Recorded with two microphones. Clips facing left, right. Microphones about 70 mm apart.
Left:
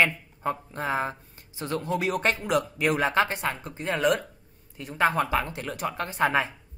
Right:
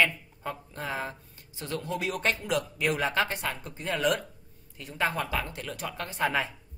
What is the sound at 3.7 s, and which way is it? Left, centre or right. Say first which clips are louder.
Speech: left 3 dB; centre.